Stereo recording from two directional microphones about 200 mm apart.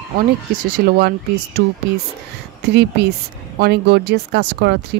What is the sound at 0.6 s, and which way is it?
Speech, 45° right (ahead or behind).